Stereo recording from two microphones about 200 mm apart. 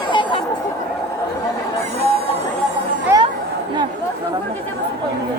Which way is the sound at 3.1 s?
15° right (ahead or behind).